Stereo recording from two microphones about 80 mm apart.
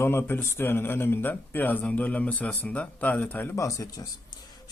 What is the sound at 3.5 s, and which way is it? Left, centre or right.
Speech, left.